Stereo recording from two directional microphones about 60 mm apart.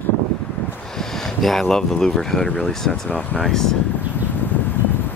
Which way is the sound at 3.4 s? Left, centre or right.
Centre.